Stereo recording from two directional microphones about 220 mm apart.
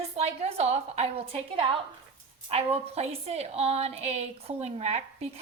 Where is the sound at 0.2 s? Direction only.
25° right (ahead or behind).